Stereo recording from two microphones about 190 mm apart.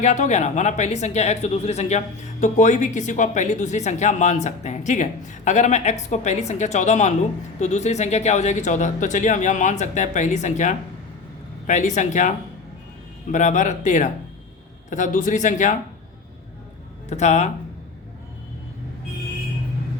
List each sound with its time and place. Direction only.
0.0 s speech: 40° left (ahead or behind)
13.3 s speech: 40° left (ahead or behind)
17.1 s speech: 35° left (ahead or behind)